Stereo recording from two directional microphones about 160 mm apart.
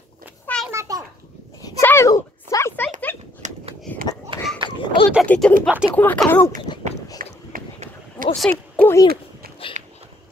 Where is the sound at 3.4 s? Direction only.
40° right (ahead or behind).